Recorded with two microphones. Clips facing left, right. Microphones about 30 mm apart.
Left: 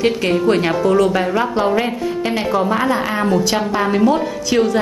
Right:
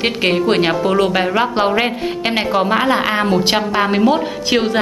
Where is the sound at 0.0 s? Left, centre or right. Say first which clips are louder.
Even; right.